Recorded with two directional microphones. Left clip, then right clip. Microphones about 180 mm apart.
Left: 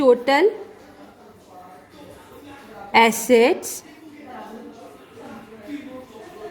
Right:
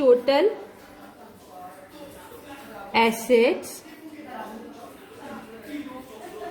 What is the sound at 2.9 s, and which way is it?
Speech, 55° left (ahead or behind).